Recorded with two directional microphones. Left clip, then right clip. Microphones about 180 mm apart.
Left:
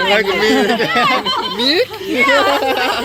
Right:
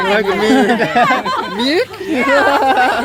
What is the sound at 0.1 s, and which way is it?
Speech, 60° right (ahead or behind).